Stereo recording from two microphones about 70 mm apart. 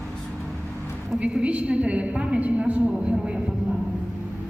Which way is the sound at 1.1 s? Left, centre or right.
Centre.